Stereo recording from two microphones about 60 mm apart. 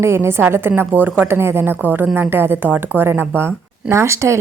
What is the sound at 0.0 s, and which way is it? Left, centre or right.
Speech, right.